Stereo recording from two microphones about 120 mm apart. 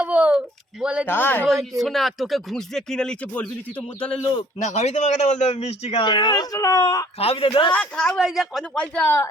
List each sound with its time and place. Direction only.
0.0 s a sound: 10° right (ahead or behind)
1.0 s speech: 15° left (ahead or behind)
1.5 s speech: centre (ahead or behind)
4.6 s a man's voice: 70° left (ahead or behind)
6.0 s speech: 40° left (ahead or behind)
7.2 s a man's voice: 55° left (ahead or behind)
7.7 s speech: 10° left (ahead or behind)